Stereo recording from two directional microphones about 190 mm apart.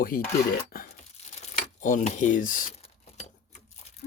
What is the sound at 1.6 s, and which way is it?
Speech, 45° left (ahead or behind).